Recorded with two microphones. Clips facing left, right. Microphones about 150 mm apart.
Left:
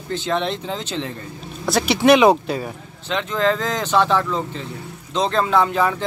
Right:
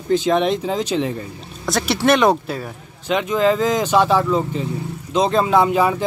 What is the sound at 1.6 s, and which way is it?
Speech, centre (ahead or behind).